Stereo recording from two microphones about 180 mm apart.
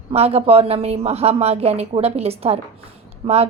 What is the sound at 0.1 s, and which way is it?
A woman's voice, 35° right (ahead or behind).